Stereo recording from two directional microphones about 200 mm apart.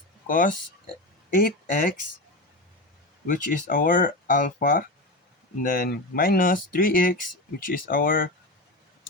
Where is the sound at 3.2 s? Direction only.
40° left (ahead or behind).